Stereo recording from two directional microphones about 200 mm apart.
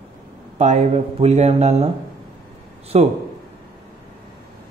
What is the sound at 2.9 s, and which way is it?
Speech, 30° right (ahead or behind).